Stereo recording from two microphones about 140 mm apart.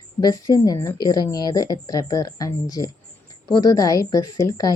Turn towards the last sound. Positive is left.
turn(degrees=25)  # may be behind; listen again after turning